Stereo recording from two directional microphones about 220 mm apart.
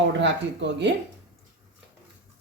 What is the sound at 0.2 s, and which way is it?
Speech, 55° right (ahead or behind).